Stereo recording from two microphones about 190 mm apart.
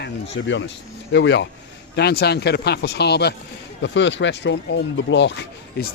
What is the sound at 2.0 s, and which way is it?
Speech, 60° left (ahead or behind).